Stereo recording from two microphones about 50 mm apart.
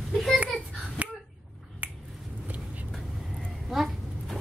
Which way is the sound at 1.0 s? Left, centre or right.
Right.